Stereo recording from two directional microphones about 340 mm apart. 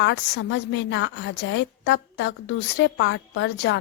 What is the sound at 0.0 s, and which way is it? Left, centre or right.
A woman's voice, left.